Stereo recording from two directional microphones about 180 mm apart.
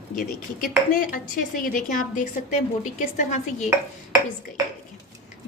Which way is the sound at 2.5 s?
40° left (ahead or behind).